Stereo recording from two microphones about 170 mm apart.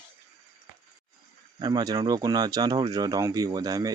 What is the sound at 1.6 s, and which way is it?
Speech, 25° right (ahead or behind).